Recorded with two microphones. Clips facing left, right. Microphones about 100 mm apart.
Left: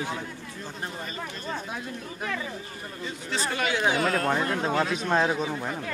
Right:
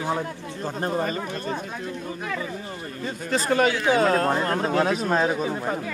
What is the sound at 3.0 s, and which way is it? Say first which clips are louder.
Speech: right 6 dB; 45° right (ahead or behind).